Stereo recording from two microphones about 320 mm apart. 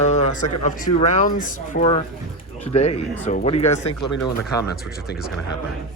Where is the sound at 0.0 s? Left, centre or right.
Left.